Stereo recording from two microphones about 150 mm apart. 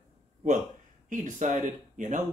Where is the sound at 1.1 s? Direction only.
55° right (ahead or behind).